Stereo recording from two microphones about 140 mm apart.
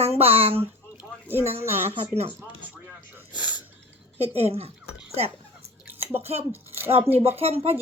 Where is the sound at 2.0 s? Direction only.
40° right (ahead or behind).